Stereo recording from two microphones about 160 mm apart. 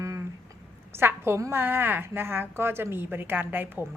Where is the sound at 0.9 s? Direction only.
15° right (ahead or behind).